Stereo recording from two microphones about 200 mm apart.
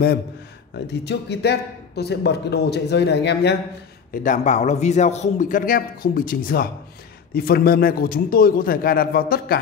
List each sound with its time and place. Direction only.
1.0 s speech: 55° left (ahead or behind)
4.1 s a man's voice: 40° left (ahead or behind)